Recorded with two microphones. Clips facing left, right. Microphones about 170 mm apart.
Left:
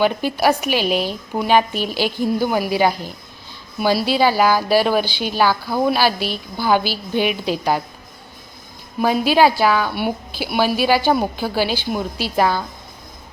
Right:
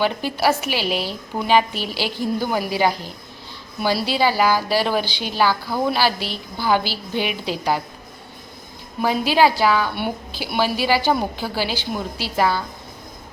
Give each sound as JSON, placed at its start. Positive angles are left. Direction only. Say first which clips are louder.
{"t": 0.0, "sound": "a woman's voice", "louder": "left 3 dB", "side_deg": 15}
{"t": 9.0, "sound": "a woman's voice", "louder": "left 2 dB", "side_deg": 15}